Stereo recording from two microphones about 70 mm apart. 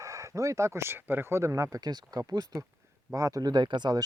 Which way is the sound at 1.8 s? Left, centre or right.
Right.